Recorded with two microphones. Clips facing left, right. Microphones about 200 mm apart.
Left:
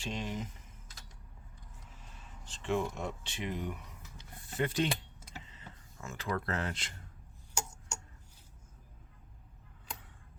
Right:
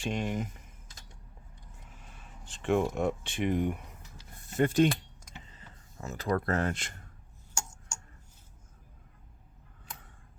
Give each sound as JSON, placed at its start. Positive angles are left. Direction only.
{"t": 0.0, "sound": "speech", "side_deg": -55}
{"t": 2.5, "sound": "speech", "side_deg": -55}